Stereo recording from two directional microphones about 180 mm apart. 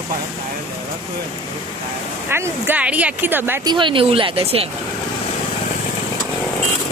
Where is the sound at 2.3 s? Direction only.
15° right (ahead or behind).